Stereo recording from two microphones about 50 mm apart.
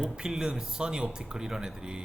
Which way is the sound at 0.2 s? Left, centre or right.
Centre.